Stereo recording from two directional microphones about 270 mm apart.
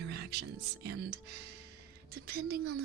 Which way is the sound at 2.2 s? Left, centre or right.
Right.